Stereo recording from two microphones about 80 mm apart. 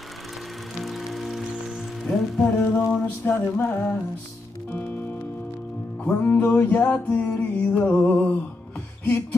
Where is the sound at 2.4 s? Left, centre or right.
Left.